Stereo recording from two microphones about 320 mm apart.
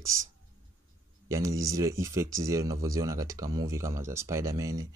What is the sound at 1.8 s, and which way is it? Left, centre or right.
Speech, centre.